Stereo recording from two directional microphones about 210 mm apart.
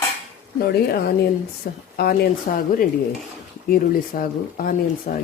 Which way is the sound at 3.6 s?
45° left (ahead or behind).